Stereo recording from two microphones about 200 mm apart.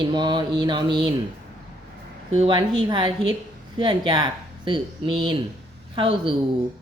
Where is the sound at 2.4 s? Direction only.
25° right (ahead or behind).